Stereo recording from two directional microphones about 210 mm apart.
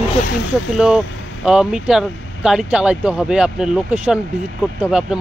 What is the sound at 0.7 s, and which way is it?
Speech, 5° right (ahead or behind).